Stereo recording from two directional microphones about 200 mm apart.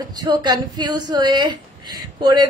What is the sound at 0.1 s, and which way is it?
A woman's voice, 20° right (ahead or behind).